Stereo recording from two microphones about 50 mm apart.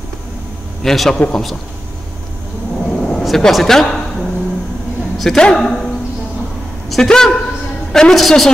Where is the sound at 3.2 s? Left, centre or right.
Centre.